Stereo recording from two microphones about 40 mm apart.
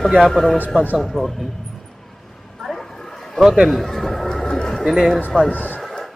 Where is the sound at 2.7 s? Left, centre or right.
Centre.